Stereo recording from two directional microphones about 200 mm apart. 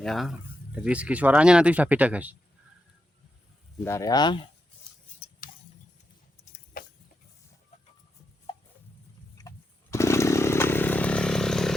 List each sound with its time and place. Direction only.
0.0 s speech: centre (ahead or behind)
3.8 s speech: 15° left (ahead or behind)
9.9 s chainsaw: 15° left (ahead or behind)